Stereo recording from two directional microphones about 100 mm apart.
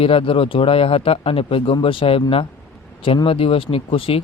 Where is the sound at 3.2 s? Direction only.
65° left (ahead or behind).